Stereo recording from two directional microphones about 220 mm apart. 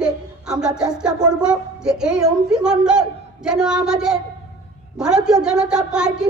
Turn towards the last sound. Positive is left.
turn(degrees=-5)  # may be behind; listen again after turning